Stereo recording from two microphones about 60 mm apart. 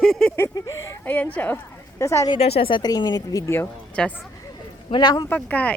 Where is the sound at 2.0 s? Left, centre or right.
Left.